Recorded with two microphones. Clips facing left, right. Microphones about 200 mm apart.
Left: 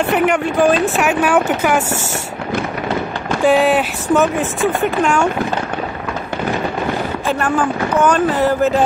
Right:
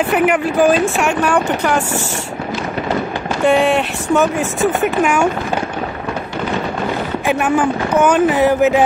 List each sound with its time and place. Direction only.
0.1 s speech: 5° right (ahead or behind)
3.4 s speech: centre (ahead or behind)
7.2 s speech: 10° right (ahead or behind)